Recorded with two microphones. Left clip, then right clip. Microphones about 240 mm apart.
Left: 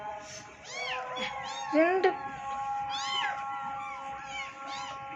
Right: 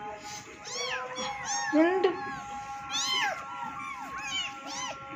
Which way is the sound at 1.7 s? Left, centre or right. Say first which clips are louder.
Even; centre.